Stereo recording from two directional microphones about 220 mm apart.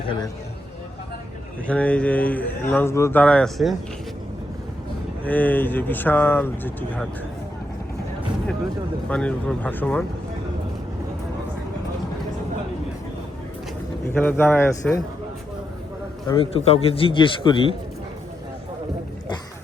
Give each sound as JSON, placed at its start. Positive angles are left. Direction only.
{"t": 1.6, "sound": "speech", "side_deg": 5}
{"t": 5.2, "sound": "speech", "side_deg": 5}
{"t": 9.0, "sound": "speech", "side_deg": 5}
{"t": 14.1, "sound": "speech", "side_deg": 10}
{"t": 16.2, "sound": "a man's voice", "side_deg": 20}